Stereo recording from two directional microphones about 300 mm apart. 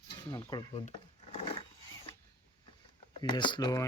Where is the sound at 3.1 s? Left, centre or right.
Centre.